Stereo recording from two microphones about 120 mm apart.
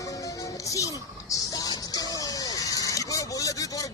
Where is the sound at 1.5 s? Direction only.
30° left (ahead or behind).